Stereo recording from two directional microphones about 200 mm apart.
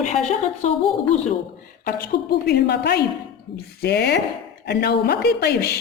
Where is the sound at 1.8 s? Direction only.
50° left (ahead or behind).